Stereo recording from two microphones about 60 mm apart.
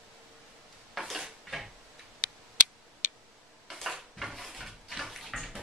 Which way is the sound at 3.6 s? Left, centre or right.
Centre.